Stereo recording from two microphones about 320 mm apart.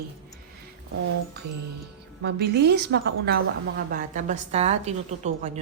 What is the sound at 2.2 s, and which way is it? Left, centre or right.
A woman's voice, right.